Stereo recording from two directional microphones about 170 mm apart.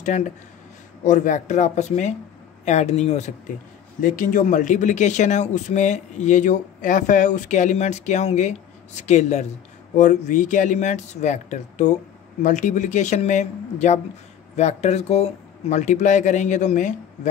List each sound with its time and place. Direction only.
0.1 s speech: 40° left (ahead or behind)